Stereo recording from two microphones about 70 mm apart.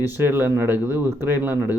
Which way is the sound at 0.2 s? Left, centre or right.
Right.